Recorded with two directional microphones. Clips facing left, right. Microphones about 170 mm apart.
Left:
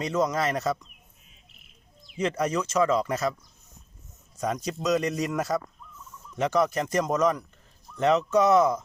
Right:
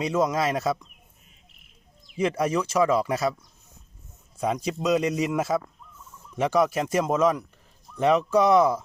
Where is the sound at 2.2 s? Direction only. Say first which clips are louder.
Right 2 dB; 10° right (ahead or behind).